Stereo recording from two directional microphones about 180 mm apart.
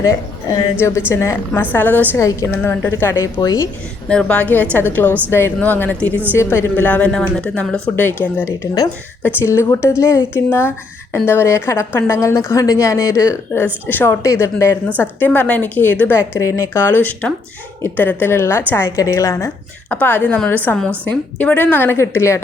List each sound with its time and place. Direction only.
0.0 s a woman's voice: 20° left (ahead or behind)
4.1 s a woman's voice: 5° left (ahead or behind)